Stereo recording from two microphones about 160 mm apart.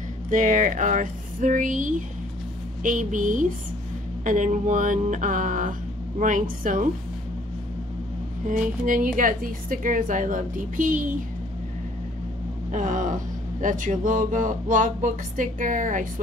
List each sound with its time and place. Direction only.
0.3 s speech: 50° right (ahead or behind)
8.5 s speech: 55° right (ahead or behind)
12.7 s speech: 55° right (ahead or behind)